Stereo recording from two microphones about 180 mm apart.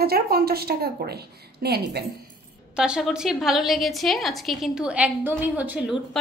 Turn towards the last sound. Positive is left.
turn(degrees=-5)  # may be behind; listen again after turning